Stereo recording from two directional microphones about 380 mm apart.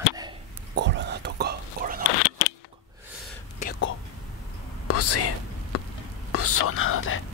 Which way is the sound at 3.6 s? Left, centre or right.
Left.